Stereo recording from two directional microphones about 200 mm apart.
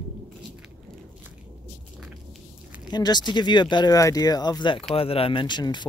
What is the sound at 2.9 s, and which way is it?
Speech, 20° left (ahead or behind).